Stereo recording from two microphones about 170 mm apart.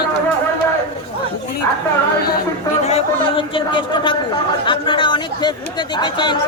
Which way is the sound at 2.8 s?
35° left (ahead or behind).